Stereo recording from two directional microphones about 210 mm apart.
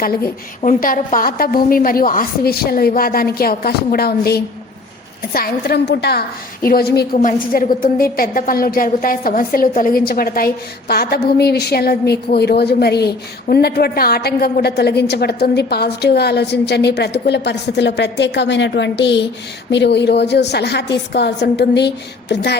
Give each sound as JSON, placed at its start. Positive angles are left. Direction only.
{"t": 0.0, "sound": "a woman's voice", "side_deg": 45}